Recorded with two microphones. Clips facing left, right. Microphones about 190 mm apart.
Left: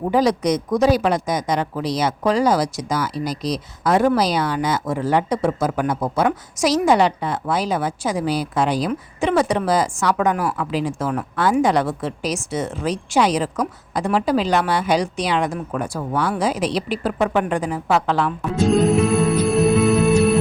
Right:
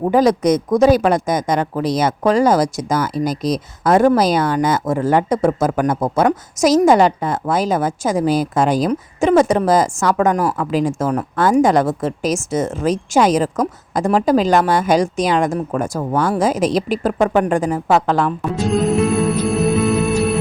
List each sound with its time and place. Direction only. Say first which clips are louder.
0.0 s speech: right 4 dB; 50° right (ahead or behind)
18.6 s music: left 1 dB; centre (ahead or behind)